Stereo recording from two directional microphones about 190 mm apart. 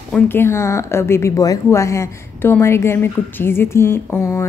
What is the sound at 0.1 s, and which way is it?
Speech, 10° left (ahead or behind).